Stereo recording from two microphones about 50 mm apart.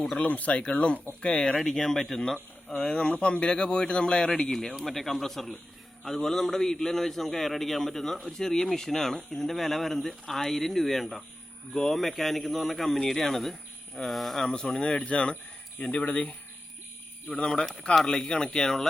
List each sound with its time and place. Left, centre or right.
0.2 s speech: left
1.7 s speech: centre
2.6 s a man's voice: left; by 14.4 s centre
14.4 s speech: centre
17.4 s speech: centre